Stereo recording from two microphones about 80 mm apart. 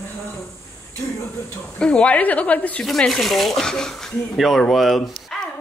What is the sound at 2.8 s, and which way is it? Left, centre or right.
Speech, centre.